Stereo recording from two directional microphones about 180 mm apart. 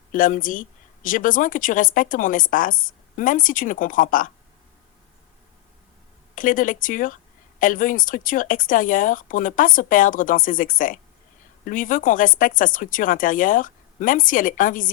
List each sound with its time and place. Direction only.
0.1 s speech: 50° left (ahead or behind)
6.3 s speech: 50° left (ahead or behind)